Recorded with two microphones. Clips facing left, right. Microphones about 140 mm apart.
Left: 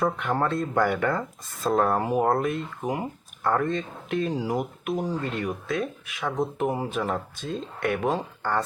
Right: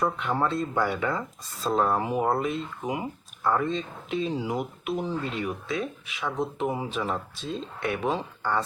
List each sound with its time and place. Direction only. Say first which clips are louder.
0.0 s speech: left 1 dB; 50° left (ahead or behind)